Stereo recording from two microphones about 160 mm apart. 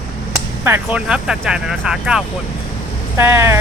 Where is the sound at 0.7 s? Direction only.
10° right (ahead or behind).